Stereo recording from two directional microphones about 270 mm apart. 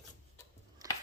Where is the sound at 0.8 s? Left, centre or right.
Centre.